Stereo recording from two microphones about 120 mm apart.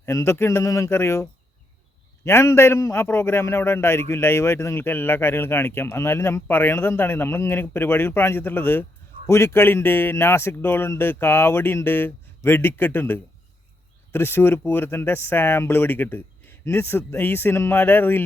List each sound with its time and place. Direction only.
0.0 s a man's voice: 20° left (ahead or behind)